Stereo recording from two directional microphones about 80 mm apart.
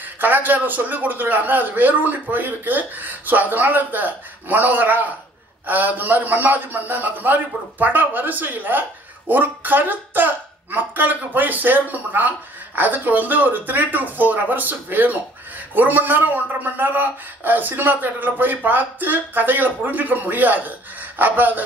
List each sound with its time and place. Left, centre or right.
0.0 s a man's voice: right